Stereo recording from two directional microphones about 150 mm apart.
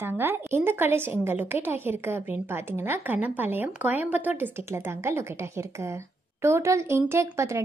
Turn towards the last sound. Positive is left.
turn(degrees=-20)  # may be behind; listen again after turning